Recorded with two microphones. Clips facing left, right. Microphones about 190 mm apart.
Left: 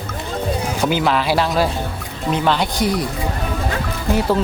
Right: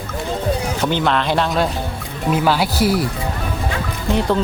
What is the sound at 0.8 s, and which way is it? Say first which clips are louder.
Speech: left 3 dB; 5° left (ahead or behind).